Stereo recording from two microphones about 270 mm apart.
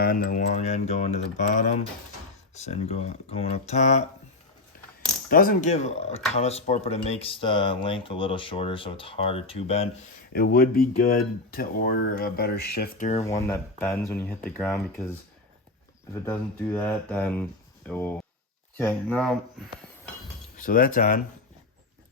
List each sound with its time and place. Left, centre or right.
0.0 s speech: left
5.3 s speech: left
10.3 s speech: left
13.2 s speech: centre
16.2 s speech: centre
20.6 s speech: left